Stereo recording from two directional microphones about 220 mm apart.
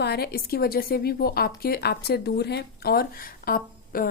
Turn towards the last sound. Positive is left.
turn(degrees=40)  # may be behind; listen again after turning